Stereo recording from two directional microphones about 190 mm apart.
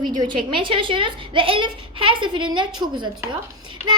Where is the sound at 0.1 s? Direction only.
25° right (ahead or behind).